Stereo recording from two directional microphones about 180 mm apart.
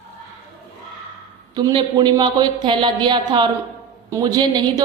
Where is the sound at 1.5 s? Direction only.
25° right (ahead or behind).